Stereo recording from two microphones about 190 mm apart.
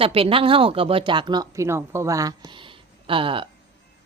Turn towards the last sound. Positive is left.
turn(degrees=-25)  # may be behind; listen again after turning